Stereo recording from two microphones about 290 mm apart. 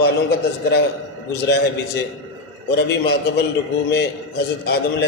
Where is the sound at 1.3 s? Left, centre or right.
Left.